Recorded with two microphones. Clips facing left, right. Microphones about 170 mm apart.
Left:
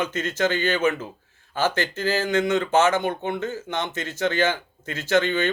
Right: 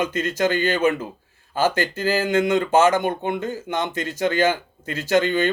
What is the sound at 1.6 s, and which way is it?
Speech, 10° right (ahead or behind).